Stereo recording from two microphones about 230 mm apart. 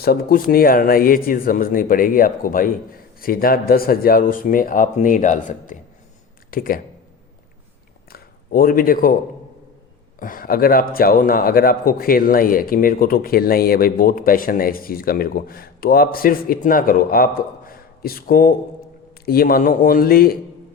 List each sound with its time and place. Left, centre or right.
0.0 s a man's voice: left
8.1 s speech: left
10.2 s a man's voice: left